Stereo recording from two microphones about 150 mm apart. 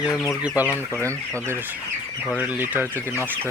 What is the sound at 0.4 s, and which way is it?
Speech, 10° right (ahead or behind).